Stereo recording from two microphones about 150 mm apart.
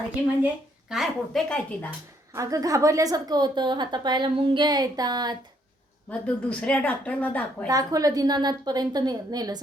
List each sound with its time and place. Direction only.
0.9 s a woman's voice: centre (ahead or behind)
2.3 s a woman's voice: 20° right (ahead or behind)
6.1 s a woman's voice: 10° left (ahead or behind)
7.7 s a woman's voice: 25° right (ahead or behind)